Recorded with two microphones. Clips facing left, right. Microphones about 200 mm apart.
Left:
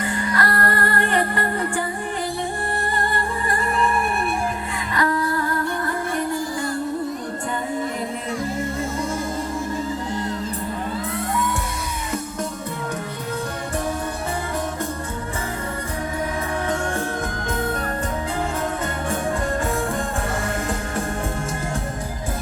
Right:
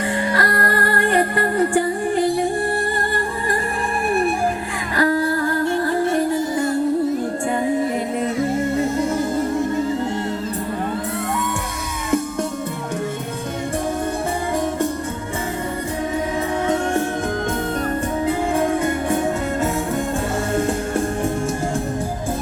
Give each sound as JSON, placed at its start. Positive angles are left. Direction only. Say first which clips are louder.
{"t": 0.0, "sound": "music", "louder": "right 3 dB", "side_deg": -30}
{"t": 4.9, "sound": "music", "louder": "right 4 dB", "side_deg": -35}